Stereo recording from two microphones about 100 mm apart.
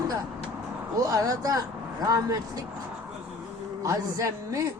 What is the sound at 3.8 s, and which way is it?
Speech, 35° right (ahead or behind).